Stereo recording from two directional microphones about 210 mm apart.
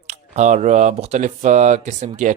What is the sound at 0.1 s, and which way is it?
Speech, 35° right (ahead or behind).